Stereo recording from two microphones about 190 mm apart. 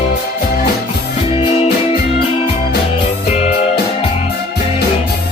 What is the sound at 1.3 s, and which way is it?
Music, 30° left (ahead or behind).